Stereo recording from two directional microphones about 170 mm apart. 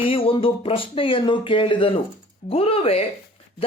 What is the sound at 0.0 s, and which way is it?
A woman's voice, 35° left (ahead or behind).